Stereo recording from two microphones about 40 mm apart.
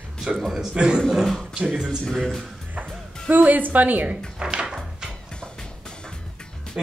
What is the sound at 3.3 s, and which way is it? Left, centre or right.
Speech, right.